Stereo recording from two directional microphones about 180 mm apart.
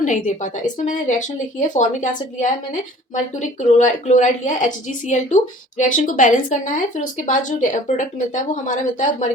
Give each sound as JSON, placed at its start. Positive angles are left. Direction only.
{"t": 0.0, "sound": "a woman's voice", "side_deg": 45}